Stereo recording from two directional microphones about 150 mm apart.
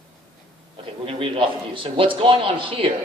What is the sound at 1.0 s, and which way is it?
A woman's voice, 35° right (ahead or behind).